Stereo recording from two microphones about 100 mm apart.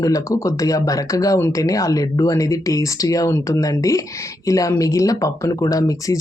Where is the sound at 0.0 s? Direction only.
35° left (ahead or behind).